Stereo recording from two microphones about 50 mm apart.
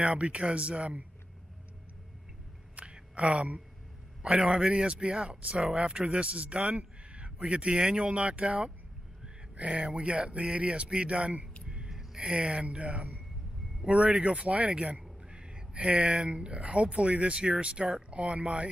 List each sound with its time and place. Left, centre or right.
0.0 s speech: right
2.7 s a sound: right
4.2 s a man's voice: right
11.6 s gasp: centre
12.2 s speech: centre